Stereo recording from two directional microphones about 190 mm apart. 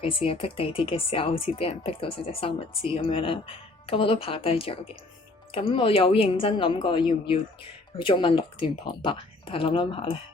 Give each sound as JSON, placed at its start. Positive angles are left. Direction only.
{"t": 0.0, "sound": "speech", "side_deg": 30}